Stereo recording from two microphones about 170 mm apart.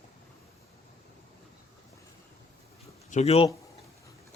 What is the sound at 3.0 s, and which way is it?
Speech, 40° left (ahead or behind).